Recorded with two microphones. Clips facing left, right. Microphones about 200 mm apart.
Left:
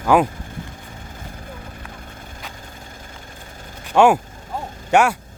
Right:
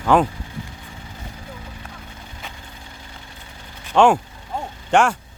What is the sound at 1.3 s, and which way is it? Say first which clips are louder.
Clip-clop: left 1 dB; 50° left (ahead or behind).